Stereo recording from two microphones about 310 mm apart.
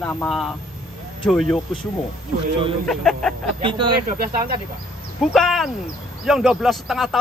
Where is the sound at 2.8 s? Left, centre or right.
Centre.